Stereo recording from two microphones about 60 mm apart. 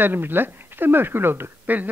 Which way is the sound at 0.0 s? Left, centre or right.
Right.